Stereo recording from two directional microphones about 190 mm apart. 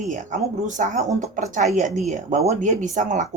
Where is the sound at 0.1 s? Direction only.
40° right (ahead or behind).